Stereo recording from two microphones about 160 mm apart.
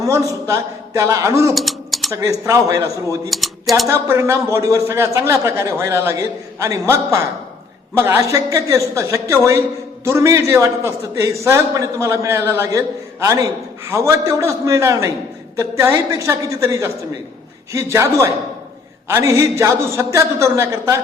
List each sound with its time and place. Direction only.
0.0 s a man's voice: 20° right (ahead or behind)
1.5 s typing: centre (ahead or behind)
2.1 s a man's voice: 20° right (ahead or behind)
3.2 s speech: centre (ahead or behind)
3.8 s a man's voice: 15° right (ahead or behind)